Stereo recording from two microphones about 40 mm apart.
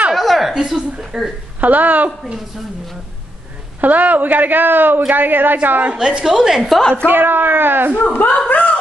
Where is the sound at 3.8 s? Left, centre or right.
Right.